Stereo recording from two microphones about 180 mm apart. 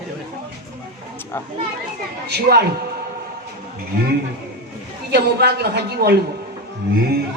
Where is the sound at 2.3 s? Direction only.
60° right (ahead or behind).